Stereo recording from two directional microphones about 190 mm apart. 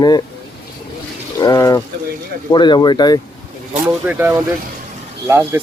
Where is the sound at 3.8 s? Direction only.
10° right (ahead or behind).